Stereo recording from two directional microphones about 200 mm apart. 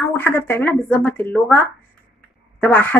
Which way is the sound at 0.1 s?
10° left (ahead or behind).